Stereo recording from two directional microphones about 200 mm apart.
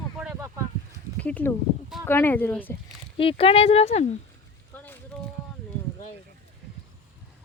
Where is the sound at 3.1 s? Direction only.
25° left (ahead or behind).